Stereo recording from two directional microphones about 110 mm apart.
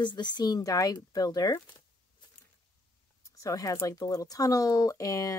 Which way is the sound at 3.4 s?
30° left (ahead or behind).